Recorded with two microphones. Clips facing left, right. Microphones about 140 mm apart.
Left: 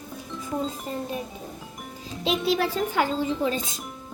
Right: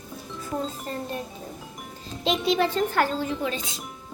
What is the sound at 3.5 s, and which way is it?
Speech, 45° left (ahead or behind).